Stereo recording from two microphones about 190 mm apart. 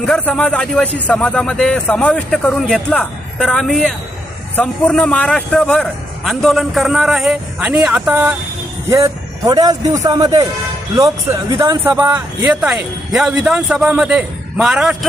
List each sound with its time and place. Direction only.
0.0 s speech: 5° left (ahead or behind)
9.5 s a man's voice: 20° right (ahead or behind)